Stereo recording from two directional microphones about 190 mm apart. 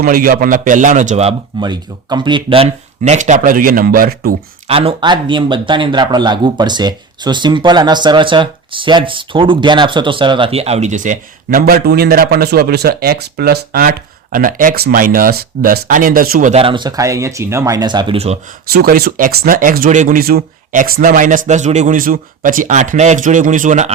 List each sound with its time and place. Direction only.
0.0 s speech: 50° right (ahead or behind)
4.7 s speech: 30° right (ahead or behind)
11.6 s speech: 55° right (ahead or behind)
16.5 s speech: 30° right (ahead or behind)
18.7 s speech: 55° right (ahead or behind)